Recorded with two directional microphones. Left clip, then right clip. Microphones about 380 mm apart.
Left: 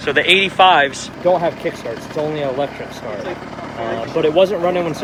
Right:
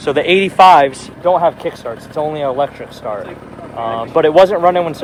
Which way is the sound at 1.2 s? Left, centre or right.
Centre.